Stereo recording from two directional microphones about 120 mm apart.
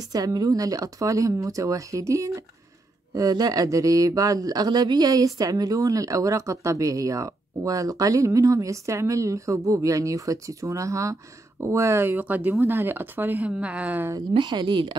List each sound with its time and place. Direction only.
0.1 s speech: 30° right (ahead or behind); by 14.1 s 15° right (ahead or behind)
14.3 s a woman's voice: 40° right (ahead or behind)